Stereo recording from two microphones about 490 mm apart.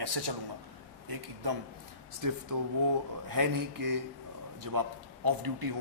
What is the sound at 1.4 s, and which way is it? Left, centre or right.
Speech, right.